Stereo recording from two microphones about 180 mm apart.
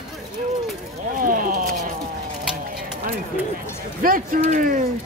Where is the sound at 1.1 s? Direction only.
50° right (ahead or behind).